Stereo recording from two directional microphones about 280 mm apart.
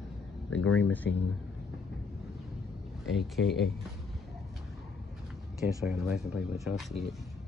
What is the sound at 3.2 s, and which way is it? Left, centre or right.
Speech, centre.